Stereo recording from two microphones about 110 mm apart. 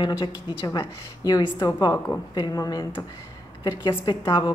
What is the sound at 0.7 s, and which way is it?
Speech, 35° left (ahead or behind).